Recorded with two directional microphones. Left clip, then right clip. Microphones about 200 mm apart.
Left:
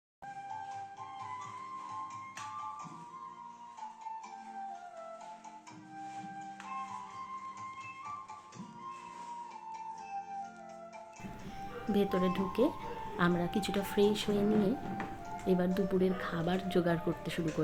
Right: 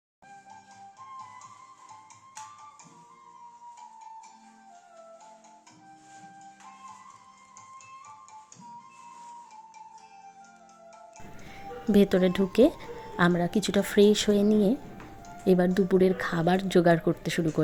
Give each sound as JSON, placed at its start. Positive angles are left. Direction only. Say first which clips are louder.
{"t": 11.9, "sound": "speech", "louder": "right 9 dB", "side_deg": -40}